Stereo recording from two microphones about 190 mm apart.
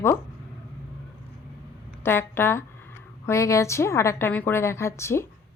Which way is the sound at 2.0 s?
10° left (ahead or behind).